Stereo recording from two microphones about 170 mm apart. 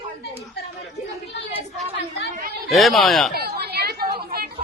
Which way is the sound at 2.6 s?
Centre (ahead or behind).